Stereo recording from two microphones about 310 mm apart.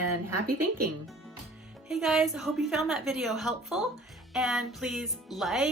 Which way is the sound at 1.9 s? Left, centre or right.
Centre.